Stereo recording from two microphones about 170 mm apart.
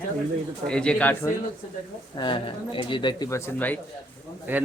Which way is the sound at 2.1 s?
30° left (ahead or behind).